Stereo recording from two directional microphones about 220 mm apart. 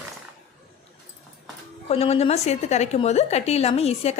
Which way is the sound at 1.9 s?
30° left (ahead or behind).